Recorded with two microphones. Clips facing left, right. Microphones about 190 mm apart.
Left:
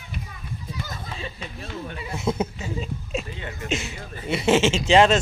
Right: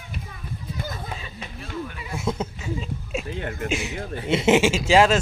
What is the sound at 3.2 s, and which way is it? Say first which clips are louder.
Speech: right 5 dB; 60° right (ahead or behind).